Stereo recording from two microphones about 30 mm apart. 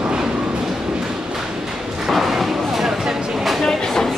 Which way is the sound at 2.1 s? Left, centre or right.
Centre.